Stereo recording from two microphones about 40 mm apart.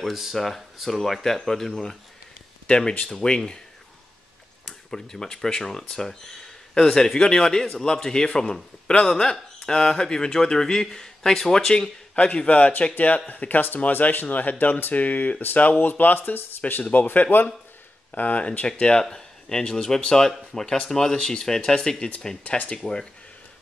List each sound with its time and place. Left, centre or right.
0.1 s speech: centre
2.6 s speech: left
4.6 s speech: centre
12.4 s speech: left
18.1 s speech: left
18.7 s speech: centre